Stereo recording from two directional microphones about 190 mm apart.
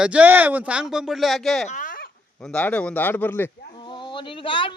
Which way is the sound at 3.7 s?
25° left (ahead or behind).